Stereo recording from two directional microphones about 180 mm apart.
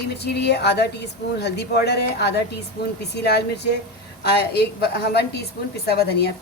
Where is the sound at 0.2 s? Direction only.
70° left (ahead or behind).